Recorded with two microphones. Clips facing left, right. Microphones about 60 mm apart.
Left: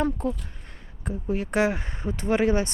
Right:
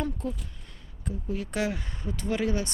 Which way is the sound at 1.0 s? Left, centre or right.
Left.